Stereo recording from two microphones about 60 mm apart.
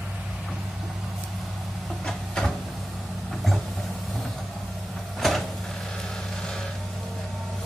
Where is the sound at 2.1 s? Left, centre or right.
Centre.